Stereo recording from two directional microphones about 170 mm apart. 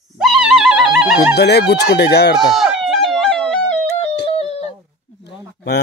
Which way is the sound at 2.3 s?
5° right (ahead or behind).